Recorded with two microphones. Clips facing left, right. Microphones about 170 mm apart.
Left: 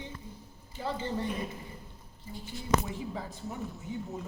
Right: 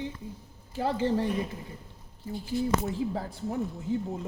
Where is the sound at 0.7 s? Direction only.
70° right (ahead or behind).